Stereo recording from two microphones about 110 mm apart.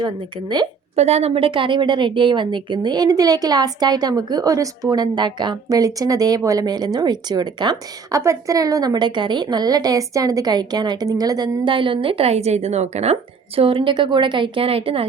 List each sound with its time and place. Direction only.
0.0 s a woman's voice: 40° right (ahead or behind)
0.9 s a woman's voice: 80° right; by 7.8 s 40° right (ahead or behind)
8.1 s a woman's voice: 30° right (ahead or behind); by 13.1 s 85° right
13.6 s a woman's voice: 55° right (ahead or behind)